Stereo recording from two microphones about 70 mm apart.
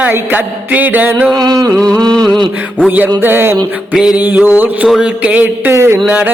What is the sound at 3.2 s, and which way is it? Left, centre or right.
Music, right.